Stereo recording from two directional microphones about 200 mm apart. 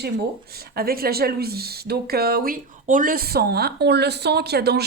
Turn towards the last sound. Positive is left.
turn(degrees=-55)  # may be behind; listen again after turning